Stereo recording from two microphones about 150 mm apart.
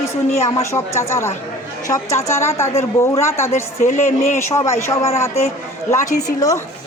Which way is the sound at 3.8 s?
55° left (ahead or behind).